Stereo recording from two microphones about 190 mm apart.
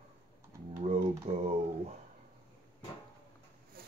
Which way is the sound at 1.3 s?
30° right (ahead or behind).